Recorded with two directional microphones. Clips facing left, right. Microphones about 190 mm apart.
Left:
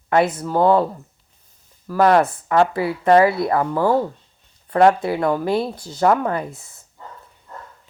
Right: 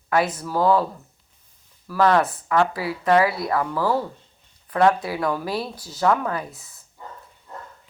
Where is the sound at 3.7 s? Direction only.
20° left (ahead or behind).